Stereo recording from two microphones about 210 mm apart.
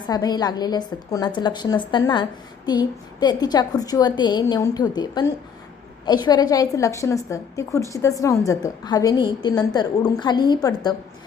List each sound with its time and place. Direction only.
0.1 s a woman's voice: 20° left (ahead or behind)